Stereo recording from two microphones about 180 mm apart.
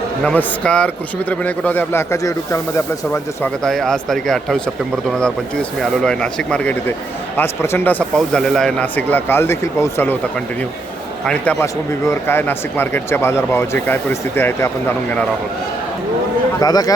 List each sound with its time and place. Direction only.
0.3 s speech: 5° left (ahead or behind)
5.8 s speech: 5° left (ahead or behind)
11.3 s speech: 10° left (ahead or behind)
16.6 s a man's voice: 20° left (ahead or behind)